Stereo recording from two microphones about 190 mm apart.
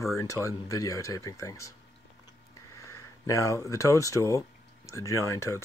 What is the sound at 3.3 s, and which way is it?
Speech, 15° left (ahead or behind).